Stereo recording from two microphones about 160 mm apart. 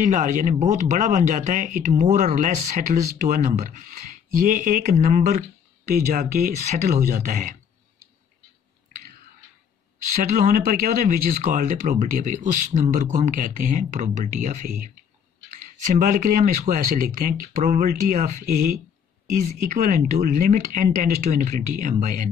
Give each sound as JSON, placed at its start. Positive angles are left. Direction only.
{"t": 0.0, "sound": "speech", "side_deg": -50}
{"t": 10.3, "sound": "speech", "side_deg": -50}
{"t": 15.6, "sound": "speech", "side_deg": -55}
{"t": 19.7, "sound": "speech", "side_deg": -50}